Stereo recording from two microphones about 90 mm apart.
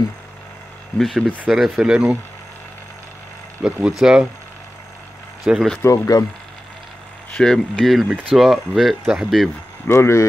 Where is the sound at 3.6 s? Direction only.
10° right (ahead or behind).